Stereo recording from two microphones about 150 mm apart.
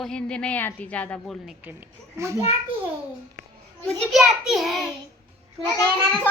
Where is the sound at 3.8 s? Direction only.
Centre (ahead or behind).